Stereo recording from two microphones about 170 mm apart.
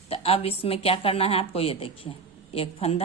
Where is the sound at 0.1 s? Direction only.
35° left (ahead or behind).